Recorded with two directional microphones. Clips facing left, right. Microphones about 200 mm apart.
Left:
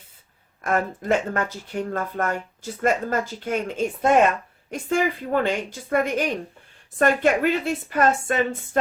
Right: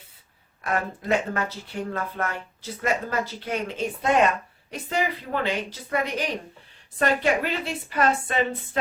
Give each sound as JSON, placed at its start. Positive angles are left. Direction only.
{"t": 0.6, "sound": "speech", "side_deg": 45}